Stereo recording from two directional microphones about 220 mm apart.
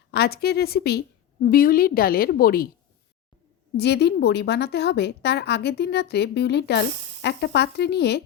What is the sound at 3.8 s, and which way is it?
Speech, 50° left (ahead or behind).